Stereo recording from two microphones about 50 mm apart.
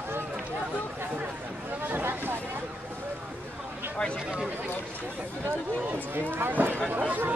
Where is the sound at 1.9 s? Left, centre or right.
Right.